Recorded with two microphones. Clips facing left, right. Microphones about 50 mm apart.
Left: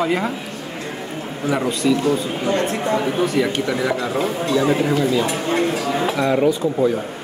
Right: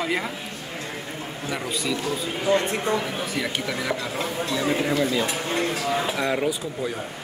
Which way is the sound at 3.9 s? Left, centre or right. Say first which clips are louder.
Left 6 dB; left.